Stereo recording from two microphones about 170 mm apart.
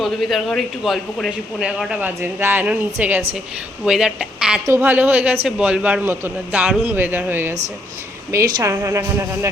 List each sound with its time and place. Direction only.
0.0 s a woman's voice: centre (ahead or behind); by 9.5 s 15° right (ahead or behind)